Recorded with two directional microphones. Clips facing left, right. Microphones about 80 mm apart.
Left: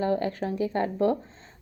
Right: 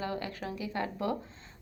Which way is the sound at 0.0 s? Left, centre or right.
Left.